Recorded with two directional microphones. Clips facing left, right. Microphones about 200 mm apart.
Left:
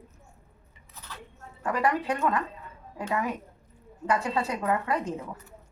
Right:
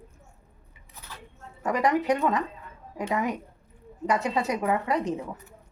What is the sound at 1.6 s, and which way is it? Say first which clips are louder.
A woman's voice: right 3 dB; 20° right (ahead or behind).